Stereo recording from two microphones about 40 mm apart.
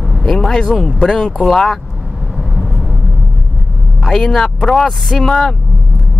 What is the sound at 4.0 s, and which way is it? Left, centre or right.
Speech, centre.